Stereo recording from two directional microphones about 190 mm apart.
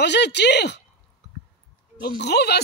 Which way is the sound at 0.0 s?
65° left (ahead or behind).